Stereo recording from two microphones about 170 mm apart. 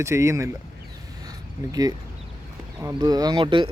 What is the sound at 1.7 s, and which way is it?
Speech, 20° right (ahead or behind).